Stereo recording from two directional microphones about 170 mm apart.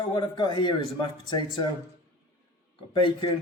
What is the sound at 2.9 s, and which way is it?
Speech, 30° left (ahead or behind).